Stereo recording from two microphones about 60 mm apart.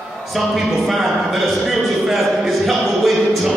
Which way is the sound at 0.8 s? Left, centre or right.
Centre.